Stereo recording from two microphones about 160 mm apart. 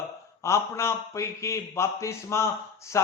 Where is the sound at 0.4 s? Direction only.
15° left (ahead or behind).